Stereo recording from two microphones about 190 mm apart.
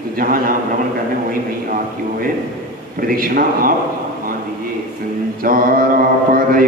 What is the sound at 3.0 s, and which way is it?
Speech, 50° right (ahead or behind).